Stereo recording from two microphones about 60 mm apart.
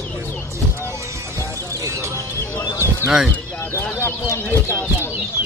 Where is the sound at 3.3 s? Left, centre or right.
Left.